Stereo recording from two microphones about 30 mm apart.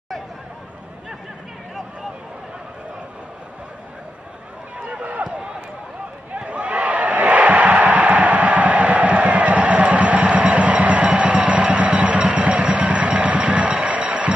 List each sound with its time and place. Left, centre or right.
4.8 s run: right
5.2 s run: right
6.3 s a sound: right